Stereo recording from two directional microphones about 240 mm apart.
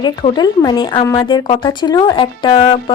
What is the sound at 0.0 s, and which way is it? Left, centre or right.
Speech, centre.